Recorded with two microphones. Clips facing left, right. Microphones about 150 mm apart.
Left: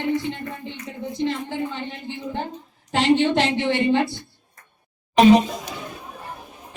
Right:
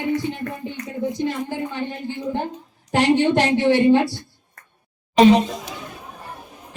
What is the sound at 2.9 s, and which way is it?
A woman's voice, 15° right (ahead or behind).